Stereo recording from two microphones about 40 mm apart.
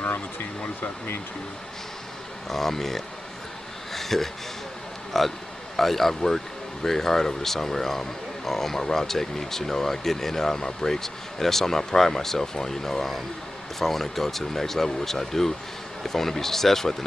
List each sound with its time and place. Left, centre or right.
0.8 s speech: left
2.5 s speech: centre
3.9 s a sound: centre
5.1 s speech: centre